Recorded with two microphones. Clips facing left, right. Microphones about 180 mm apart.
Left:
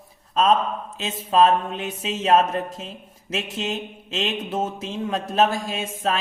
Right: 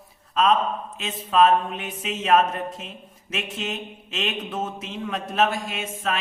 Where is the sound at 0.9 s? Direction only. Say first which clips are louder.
Left 1 dB; 30° left (ahead or behind).